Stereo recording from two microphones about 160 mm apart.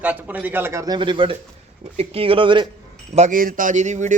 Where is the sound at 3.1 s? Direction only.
50° right (ahead or behind).